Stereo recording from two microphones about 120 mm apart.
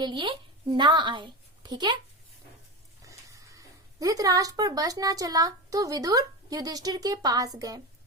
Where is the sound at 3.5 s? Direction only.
30° right (ahead or behind).